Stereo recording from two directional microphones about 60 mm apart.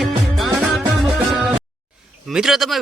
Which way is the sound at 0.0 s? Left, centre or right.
Centre.